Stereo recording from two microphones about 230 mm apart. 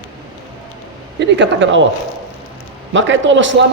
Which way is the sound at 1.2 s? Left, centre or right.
Right.